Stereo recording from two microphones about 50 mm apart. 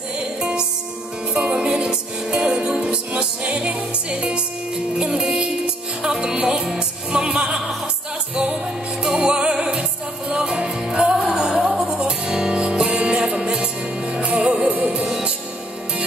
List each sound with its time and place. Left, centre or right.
0.4 s music: centre
9.0 s music: centre